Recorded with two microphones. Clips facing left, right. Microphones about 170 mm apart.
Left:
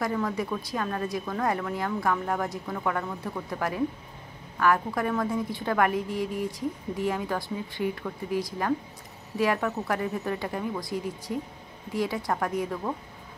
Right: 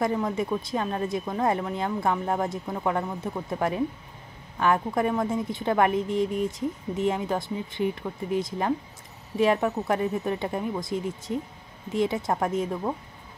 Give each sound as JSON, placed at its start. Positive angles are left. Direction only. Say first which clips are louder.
{"t": 0.0, "sound": "speech", "louder": "right 2 dB", "side_deg": -20}